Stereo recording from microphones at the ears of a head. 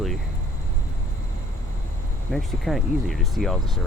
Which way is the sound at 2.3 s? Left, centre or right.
Centre.